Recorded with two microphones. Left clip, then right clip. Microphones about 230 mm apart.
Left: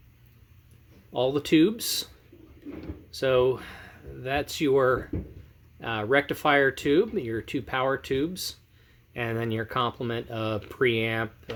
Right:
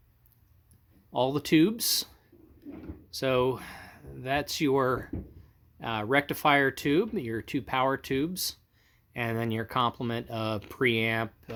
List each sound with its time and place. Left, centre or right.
1.1 s speech: right
3.1 s speech: right